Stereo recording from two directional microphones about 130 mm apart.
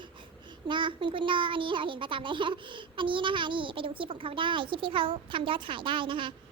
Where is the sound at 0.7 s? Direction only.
40° right (ahead or behind).